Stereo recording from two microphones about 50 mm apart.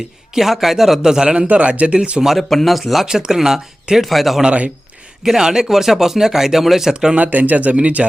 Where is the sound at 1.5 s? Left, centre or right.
Right.